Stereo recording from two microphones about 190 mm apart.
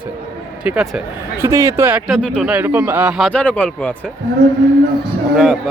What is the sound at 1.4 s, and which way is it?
Speech, 15° right (ahead or behind).